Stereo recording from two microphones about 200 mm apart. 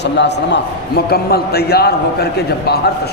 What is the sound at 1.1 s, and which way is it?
Speech, 50° left (ahead or behind).